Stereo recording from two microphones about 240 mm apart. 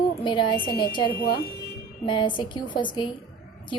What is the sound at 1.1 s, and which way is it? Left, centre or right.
Speech, left.